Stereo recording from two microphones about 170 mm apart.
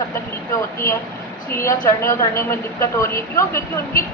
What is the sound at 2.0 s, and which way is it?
A woman's voice, 15° left (ahead or behind).